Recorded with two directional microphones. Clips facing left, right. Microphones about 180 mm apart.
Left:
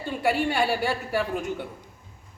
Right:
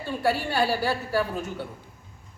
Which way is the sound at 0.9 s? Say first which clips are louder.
Right 1 dB; 15° left (ahead or behind).